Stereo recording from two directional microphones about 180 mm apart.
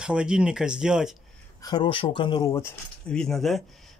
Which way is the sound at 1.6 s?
25° left (ahead or behind).